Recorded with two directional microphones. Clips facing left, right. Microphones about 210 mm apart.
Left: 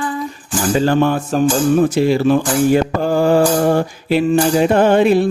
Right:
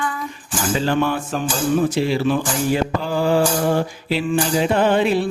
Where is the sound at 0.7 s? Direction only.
45° left (ahead or behind).